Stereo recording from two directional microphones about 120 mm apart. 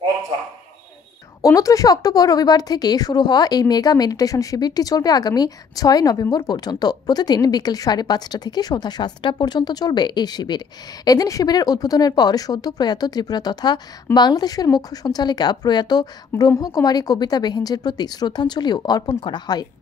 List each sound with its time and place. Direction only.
1.4 s speech: 30° left (ahead or behind)